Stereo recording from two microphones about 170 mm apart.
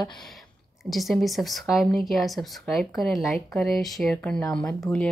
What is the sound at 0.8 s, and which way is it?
Speech, centre (ahead or behind).